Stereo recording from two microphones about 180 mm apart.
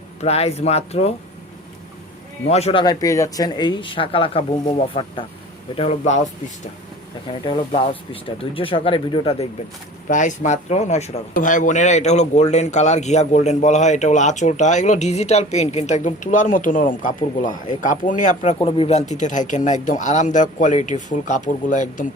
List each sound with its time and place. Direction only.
0.2 s speech: 35° left (ahead or behind)
2.5 s speech: 35° left (ahead or behind)
2.8 s speech: 20° left (ahead or behind); by 6.2 s 35° left (ahead or behind)
7.3 s speech: 25° left (ahead or behind)
10.1 s speech: 45° left (ahead or behind)